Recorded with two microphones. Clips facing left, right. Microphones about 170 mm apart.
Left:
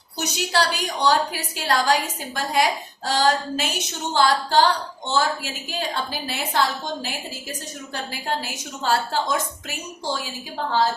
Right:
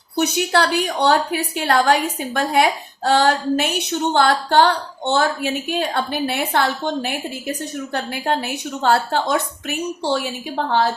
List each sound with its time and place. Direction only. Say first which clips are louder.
0.2 s a woman's voice: right 5 dB; 55° right (ahead or behind)